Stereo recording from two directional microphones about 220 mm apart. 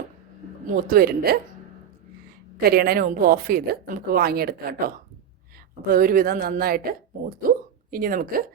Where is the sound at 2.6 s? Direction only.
45° right (ahead or behind).